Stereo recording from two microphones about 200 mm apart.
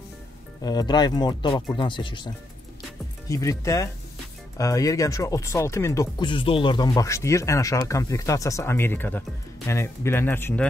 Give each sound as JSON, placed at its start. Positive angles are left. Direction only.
{"t": 0.6, "sound": "speech", "side_deg": 20}